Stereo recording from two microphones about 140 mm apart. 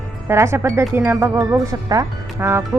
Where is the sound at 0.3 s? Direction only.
20° right (ahead or behind).